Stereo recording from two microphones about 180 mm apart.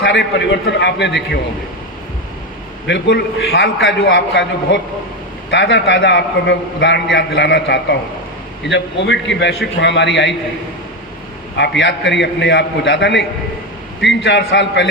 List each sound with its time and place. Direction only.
0.0 s a man's voice: 80° left
2.8 s a man's voice: 70° left (ahead or behind)
3.8 s a man's voice: 85° left
11.5 s a man's voice: 75° left (ahead or behind)